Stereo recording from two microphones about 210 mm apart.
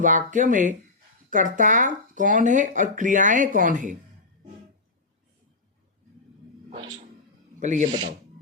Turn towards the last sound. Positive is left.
turn(degrees=-35)  # may be behind; listen again after turning